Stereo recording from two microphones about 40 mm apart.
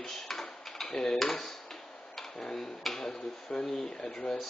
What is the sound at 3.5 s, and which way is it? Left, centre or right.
Speech, left.